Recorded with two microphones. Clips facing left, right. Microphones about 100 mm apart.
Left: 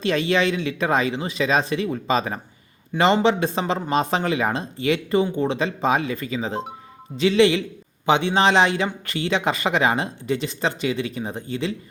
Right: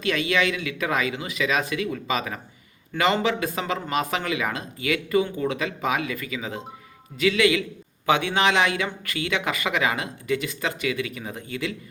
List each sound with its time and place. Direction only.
0.0 s speech: 30° left (ahead or behind)
2.9 s speech: 15° left (ahead or behind)
3.2 s a man's voice: 30° left (ahead or behind)